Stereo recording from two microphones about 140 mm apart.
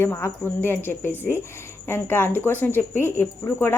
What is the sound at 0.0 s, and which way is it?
A woman's voice, 20° left (ahead or behind).